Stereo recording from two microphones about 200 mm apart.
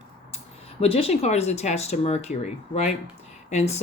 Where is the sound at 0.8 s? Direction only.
30° left (ahead or behind).